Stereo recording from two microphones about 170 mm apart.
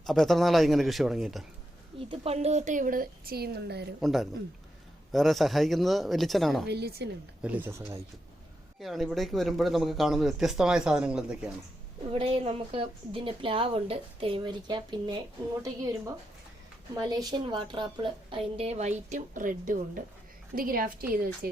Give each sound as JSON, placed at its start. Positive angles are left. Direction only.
{"t": 0.0, "sound": "speech", "side_deg": 0}
{"t": 2.0, "sound": "speech", "side_deg": -35}
{"t": 4.0, "sound": "speech", "side_deg": 0}
{"t": 6.7, "sound": "a woman's voice", "side_deg": -70}
{"t": 7.4, "sound": "speech", "side_deg": -10}
{"t": 8.8, "sound": "speech", "side_deg": 0}
{"t": 12.1, "sound": "a woman's voice", "side_deg": -35}